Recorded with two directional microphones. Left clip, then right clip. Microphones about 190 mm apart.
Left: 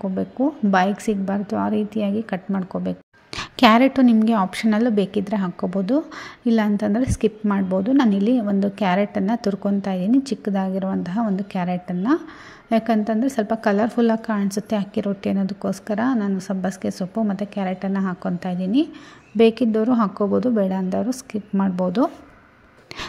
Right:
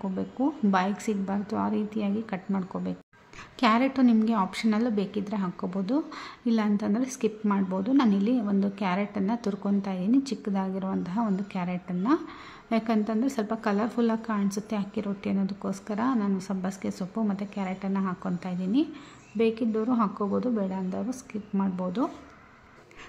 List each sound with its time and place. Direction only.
0.0 s a woman's voice: 25° left (ahead or behind)
3.3 s a woman's voice: 35° left (ahead or behind)